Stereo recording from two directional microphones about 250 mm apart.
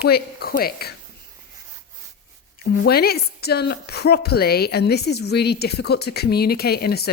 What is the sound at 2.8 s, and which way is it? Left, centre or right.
A woman's voice, left.